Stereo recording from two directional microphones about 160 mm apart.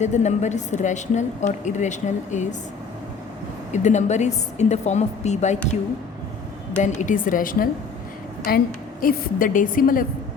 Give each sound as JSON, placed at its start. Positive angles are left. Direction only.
{"t": 0.0, "sound": "speech", "side_deg": 45}
{"t": 3.7, "sound": "speech", "side_deg": 45}
{"t": 6.8, "sound": "a woman's voice", "side_deg": 50}